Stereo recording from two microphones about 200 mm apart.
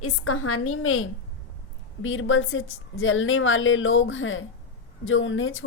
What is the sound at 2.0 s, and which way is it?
A woman's voice, 80° left.